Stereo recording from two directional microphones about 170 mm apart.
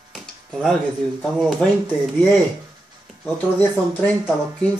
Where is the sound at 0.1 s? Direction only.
Centre (ahead or behind).